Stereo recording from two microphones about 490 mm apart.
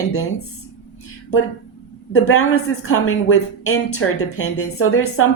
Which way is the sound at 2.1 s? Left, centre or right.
Left.